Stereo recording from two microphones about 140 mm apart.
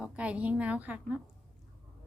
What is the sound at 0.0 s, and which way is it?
A woman's voice, 10° right (ahead or behind).